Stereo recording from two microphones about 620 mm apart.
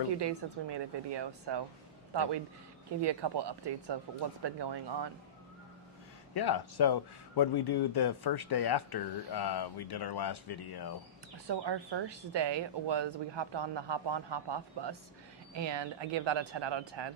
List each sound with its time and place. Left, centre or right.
0.2 s speech: right
3.0 s speech: right
6.3 s speech: left
11.4 s speech: right